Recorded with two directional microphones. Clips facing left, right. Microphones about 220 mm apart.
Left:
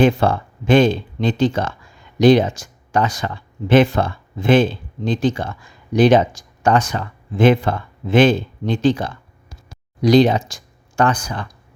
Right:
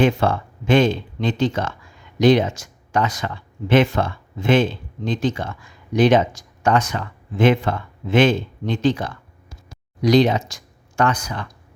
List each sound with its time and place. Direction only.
0.0 s speech: 35° left (ahead or behind)